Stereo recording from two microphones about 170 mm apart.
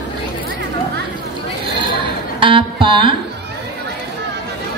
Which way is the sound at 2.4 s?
30° right (ahead or behind).